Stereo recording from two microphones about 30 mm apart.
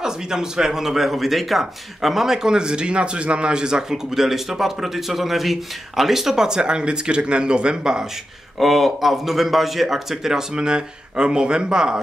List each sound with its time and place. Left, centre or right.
0.0 s speech: right
4.1 s speech: centre
6.3 s speech: right
8.5 s speech: centre
10.5 s speech: right